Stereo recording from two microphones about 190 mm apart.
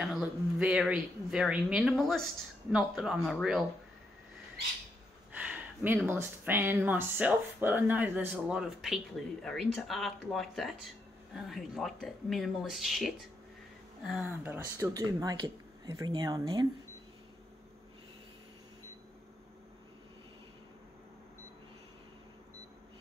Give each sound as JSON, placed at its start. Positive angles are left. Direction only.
{"t": 0.0, "sound": "speech", "side_deg": 0}
{"t": 5.4, "sound": "speech", "side_deg": -5}